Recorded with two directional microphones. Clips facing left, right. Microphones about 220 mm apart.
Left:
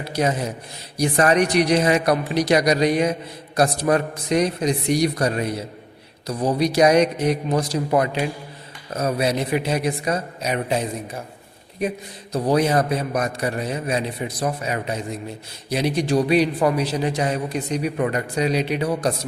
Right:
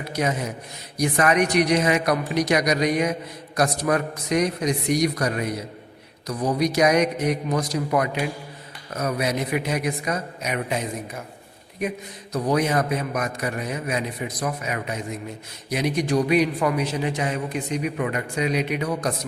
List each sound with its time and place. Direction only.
0.0 s a man's voice: 30° left (ahead or behind)